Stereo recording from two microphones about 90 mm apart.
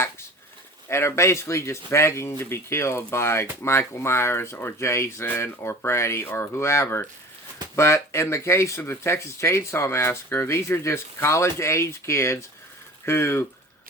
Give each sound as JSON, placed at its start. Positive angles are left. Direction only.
{"t": 0.9, "sound": "speech", "side_deg": 30}